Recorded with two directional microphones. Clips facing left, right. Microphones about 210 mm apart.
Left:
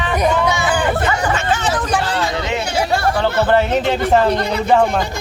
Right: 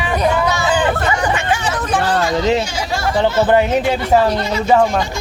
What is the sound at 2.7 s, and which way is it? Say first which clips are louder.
Chatter: left 4 dB; 60° left (ahead or behind).